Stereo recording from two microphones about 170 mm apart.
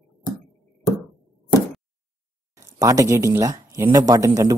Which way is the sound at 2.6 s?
20° right (ahead or behind).